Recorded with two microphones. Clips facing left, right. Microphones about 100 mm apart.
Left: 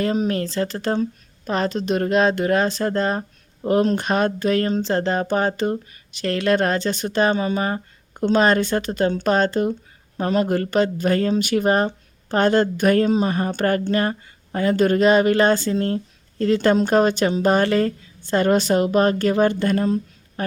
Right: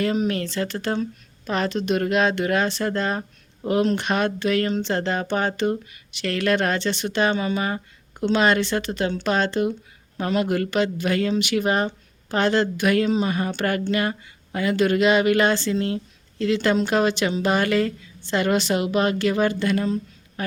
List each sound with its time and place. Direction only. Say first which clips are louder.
0.0 s a woman's voice: left 1 dB; 35° left (ahead or behind)